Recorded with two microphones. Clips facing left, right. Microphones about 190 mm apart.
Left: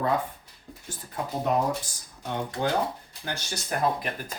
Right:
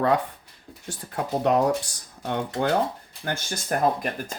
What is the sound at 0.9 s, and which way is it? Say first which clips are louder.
Speech: right 5 dB; 70° right (ahead or behind).